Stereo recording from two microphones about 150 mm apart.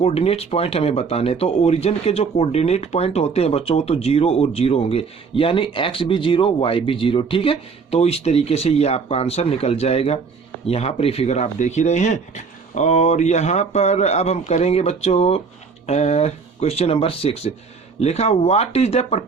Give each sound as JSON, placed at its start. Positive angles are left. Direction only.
{"t": 0.0, "sound": "a man's voice", "side_deg": 45}